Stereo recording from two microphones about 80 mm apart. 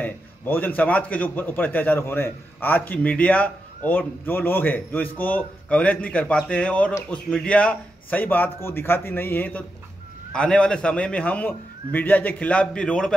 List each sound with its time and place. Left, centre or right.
0.0 s a man's voice: left
10.3 s a man's voice: centre